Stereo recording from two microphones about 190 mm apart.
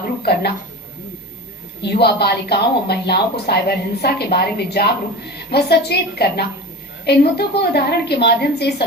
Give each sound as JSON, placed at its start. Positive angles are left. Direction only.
{"t": 0.2, "sound": "a woman's voice", "side_deg": 55}
{"t": 1.8, "sound": "a woman's voice", "side_deg": 60}